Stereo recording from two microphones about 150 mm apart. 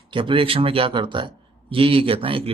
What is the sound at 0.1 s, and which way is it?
Speech, 35° right (ahead or behind).